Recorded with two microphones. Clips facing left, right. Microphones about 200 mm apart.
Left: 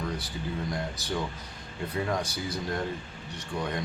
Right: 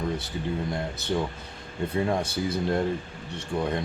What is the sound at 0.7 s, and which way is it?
Speech, 25° right (ahead or behind).